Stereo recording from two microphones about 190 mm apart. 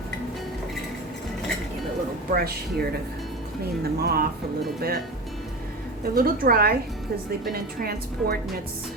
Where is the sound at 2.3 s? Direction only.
50° right (ahead or behind).